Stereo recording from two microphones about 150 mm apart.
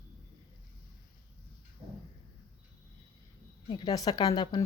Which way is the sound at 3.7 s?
30° left (ahead or behind).